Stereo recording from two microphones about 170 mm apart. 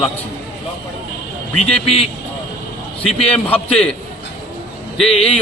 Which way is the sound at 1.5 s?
35° left (ahead or behind).